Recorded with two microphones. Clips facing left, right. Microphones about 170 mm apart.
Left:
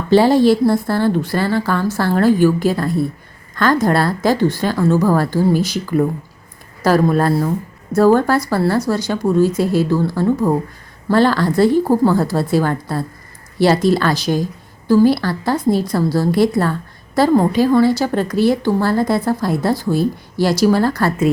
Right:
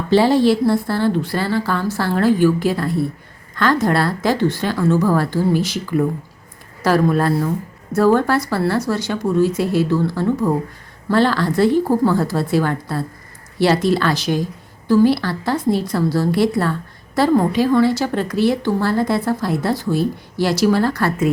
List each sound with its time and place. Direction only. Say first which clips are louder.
0.1 s a woman's voice: left 2 dB; 45° left (ahead or behind)